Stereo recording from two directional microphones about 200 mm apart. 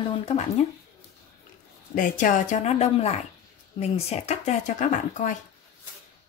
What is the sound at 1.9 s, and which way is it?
Speech, 40° left (ahead or behind).